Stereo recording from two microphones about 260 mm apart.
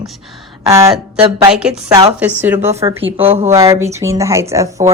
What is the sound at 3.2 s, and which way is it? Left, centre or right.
Speech, right.